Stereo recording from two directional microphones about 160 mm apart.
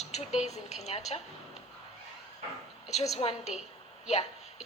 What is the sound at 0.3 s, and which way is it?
Speech, 45° left (ahead or behind).